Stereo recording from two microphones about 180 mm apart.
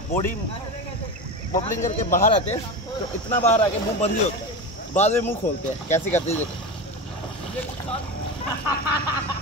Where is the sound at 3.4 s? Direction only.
35° left (ahead or behind).